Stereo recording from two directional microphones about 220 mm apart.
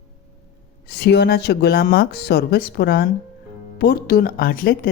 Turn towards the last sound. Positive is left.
turn(degrees=40)  # may be behind; listen again after turning